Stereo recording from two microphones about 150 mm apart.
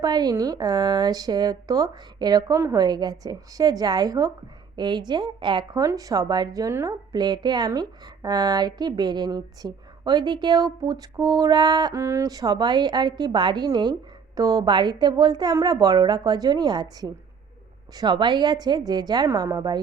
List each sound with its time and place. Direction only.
0.0 s a woman's voice: 25° right (ahead or behind)